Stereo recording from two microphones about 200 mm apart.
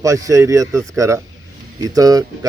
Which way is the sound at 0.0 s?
15° right (ahead or behind).